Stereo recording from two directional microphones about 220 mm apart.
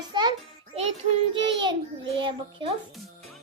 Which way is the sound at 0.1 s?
20° right (ahead or behind).